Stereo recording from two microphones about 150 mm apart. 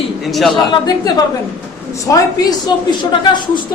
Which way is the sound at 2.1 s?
25° left (ahead or behind).